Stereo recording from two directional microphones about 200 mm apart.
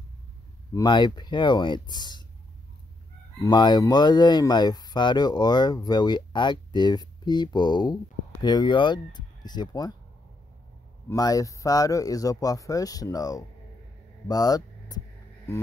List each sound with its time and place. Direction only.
0.7 s speech: 20° left (ahead or behind)
3.4 s speech: 20° left (ahead or behind)
11.1 s speech: 20° left (ahead or behind)